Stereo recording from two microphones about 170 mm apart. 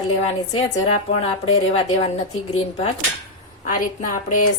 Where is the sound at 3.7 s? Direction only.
55° left (ahead or behind).